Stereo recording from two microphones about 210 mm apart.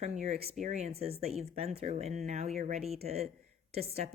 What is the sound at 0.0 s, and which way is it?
A woman's voice, 35° right (ahead or behind).